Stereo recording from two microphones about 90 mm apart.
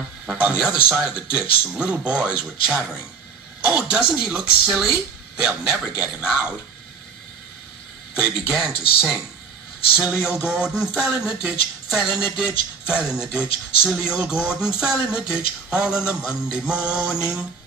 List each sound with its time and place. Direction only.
0.3 s speech: 10° right (ahead or behind)
8.1 s speech: 10° right (ahead or behind)
9.9 s speech: 10° right (ahead or behind)